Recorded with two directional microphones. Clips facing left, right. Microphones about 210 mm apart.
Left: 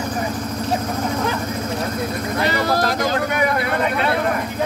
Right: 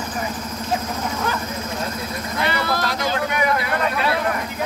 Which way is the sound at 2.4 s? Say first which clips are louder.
Left 3 dB; 40° left (ahead or behind).